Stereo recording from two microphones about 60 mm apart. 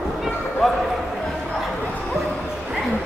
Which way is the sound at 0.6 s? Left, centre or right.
Centre.